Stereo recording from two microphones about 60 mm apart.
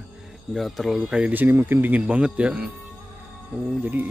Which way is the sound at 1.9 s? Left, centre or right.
Right.